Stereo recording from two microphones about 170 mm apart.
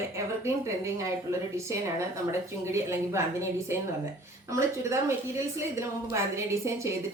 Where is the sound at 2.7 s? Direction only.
15° right (ahead or behind).